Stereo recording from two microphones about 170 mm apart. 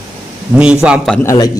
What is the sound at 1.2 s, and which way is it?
Speech, 20° left (ahead or behind).